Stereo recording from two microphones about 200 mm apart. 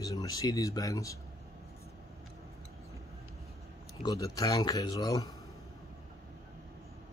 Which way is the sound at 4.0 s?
15° left (ahead or behind).